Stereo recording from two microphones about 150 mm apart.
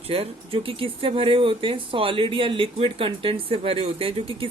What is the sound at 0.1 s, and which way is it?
Speech, 40° right (ahead or behind).